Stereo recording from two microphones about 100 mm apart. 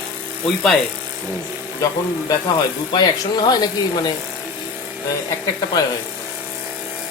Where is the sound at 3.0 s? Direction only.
45° left (ahead or behind).